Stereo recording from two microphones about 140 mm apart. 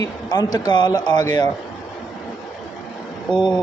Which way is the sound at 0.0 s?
25° left (ahead or behind).